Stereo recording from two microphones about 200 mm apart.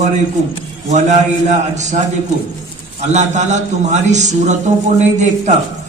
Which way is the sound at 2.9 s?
35° right (ahead or behind).